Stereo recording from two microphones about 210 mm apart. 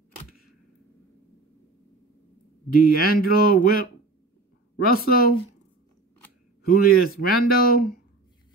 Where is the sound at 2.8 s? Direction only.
45° left (ahead or behind).